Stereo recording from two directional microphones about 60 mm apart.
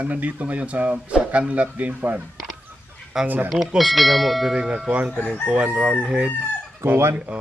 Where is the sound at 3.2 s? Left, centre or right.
Right.